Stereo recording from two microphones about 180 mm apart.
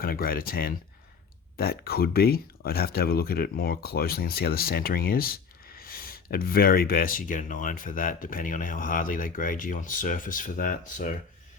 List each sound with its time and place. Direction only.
0.0 s speech: 55° left (ahead or behind)